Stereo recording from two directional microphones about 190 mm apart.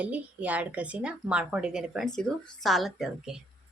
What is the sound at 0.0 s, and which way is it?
A woman's voice, 5° right (ahead or behind).